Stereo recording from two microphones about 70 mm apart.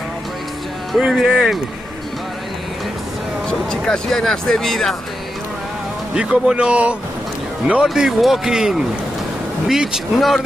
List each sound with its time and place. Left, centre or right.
1.0 s speech: centre
3.4 s speech: centre
6.1 s speech: centre
7.9 s speech: centre